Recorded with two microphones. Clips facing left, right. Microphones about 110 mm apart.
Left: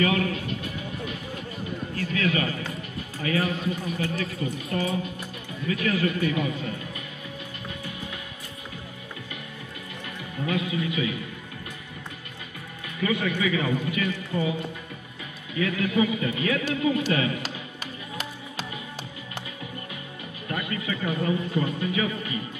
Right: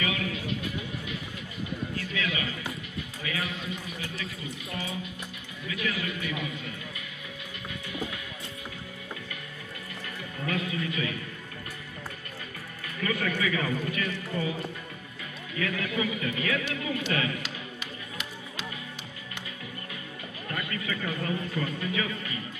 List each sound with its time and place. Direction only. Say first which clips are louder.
0.0 s a sound: left 7 dB; 45° left (ahead or behind)
2.0 s a man's voice: left 9 dB; 45° left (ahead or behind)
10.4 s a man's voice: left 4 dB; 15° left (ahead or behind)
13.0 s a man's voice: left 4 dB; 15° left (ahead or behind)
15.6 s a man's voice: left 6 dB; 20° left (ahead or behind)
20.4 s a man's voice: left 4 dB; 20° left (ahead or behind)